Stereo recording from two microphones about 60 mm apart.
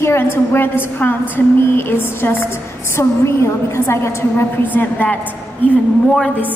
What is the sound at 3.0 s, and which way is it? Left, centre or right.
A woman's voice, left.